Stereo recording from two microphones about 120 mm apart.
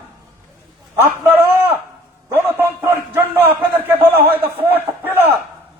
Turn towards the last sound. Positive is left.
turn(degrees=-15)  # may be behind; listen again after turning